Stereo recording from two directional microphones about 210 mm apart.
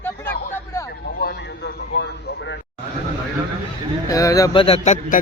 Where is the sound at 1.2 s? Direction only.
50° left (ahead or behind).